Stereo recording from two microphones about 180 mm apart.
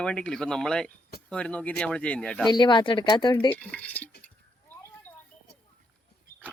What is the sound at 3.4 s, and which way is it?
Speech, 10° left (ahead or behind).